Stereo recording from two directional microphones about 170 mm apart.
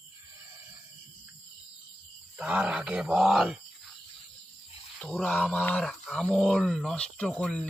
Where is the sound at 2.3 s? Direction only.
5° right (ahead or behind).